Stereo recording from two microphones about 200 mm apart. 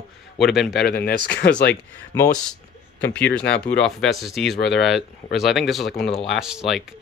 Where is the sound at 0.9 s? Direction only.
55° left (ahead or behind).